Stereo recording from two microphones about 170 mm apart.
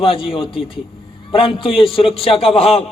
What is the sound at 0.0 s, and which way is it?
Speech, 30° left (ahead or behind).